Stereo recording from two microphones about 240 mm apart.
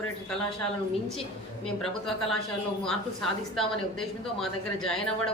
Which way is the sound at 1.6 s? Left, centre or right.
Centre.